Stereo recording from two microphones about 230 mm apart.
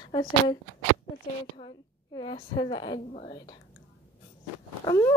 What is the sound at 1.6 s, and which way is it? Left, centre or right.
A woman's voice, centre.